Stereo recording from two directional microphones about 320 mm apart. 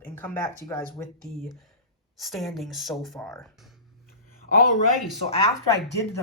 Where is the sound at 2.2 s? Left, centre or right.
Centre.